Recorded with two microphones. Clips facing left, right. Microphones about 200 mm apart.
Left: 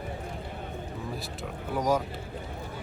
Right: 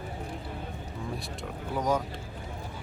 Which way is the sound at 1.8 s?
10° left (ahead or behind).